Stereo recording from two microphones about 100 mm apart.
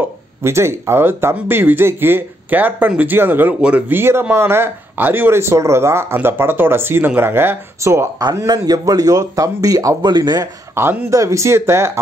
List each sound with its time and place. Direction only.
0.4 s speech: 25° right (ahead or behind)
8.6 s speech: 40° right (ahead or behind)
10.7 s speech: 25° right (ahead or behind)